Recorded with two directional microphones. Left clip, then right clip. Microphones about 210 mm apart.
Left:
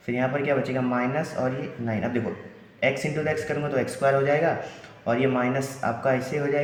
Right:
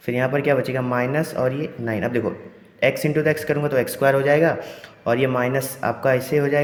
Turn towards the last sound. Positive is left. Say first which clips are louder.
# right 5 dB
turn(degrees=-55)  # may be behind; listen again after turning